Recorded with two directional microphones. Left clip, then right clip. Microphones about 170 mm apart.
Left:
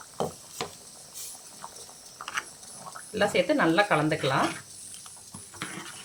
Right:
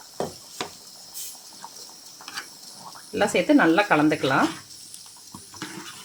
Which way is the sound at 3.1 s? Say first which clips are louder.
Right 4 dB; 45° right (ahead or behind).